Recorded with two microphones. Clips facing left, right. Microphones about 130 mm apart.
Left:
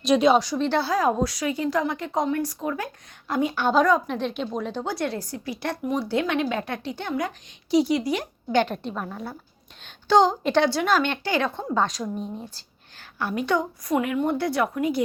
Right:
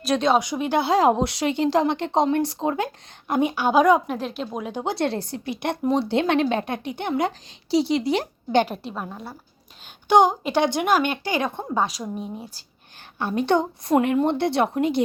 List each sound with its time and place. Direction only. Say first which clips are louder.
0.0 s a woman's voice: left 2 dB; centre (ahead or behind)
0.3 s a woman's voice: even; 15° right (ahead or behind)
1.1 s a woman's voice: right 2 dB; 25° right (ahead or behind)
4.9 s speech: right 3 dB; 30° right (ahead or behind)
7.1 s speech: right 5 dB; 30° right (ahead or behind)
8.6 s a woman's voice: left 1 dB; 5° right (ahead or behind)
10.1 s a woman's voice: right 1 dB; 15° right (ahead or behind)
13.1 s speech: right 3 dB; 25° right (ahead or behind)